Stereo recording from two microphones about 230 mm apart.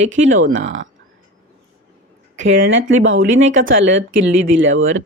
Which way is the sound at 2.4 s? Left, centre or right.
Right.